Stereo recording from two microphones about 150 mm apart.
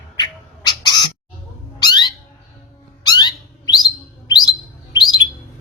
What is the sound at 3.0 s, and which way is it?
Bird, 30° left (ahead or behind).